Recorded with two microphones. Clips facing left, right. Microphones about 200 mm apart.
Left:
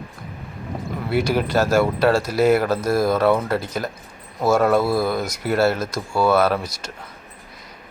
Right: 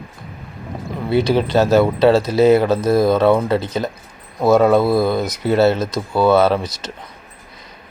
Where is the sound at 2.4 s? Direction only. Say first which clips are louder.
Right 4 dB; centre (ahead or behind).